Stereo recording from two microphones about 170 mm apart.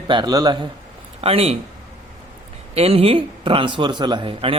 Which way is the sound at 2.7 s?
35° right (ahead or behind).